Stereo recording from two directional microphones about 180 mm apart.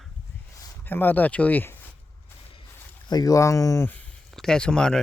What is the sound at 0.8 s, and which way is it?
Speech, 10° left (ahead or behind).